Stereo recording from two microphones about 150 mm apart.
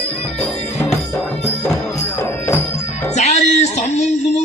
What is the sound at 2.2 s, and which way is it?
Music, 15° left (ahead or behind).